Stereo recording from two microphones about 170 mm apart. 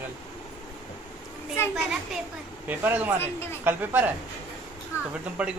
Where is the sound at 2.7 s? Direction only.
10° right (ahead or behind).